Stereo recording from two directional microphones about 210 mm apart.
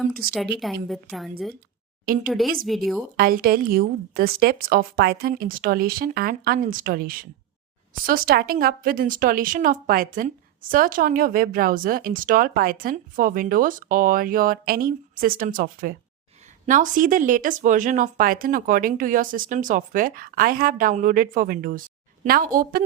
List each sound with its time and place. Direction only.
0.1 s speech: 45° right (ahead or behind)
0.6 s a woman's voice: centre (ahead or behind)
2.1 s speech: 45° right (ahead or behind)
2.6 s a woman's voice: centre (ahead or behind)
3.2 s speech: 45° right (ahead or behind)